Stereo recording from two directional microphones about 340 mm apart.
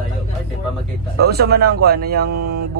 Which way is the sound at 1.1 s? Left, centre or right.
Right.